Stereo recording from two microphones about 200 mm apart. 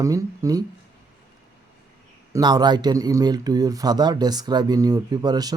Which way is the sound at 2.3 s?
20° right (ahead or behind).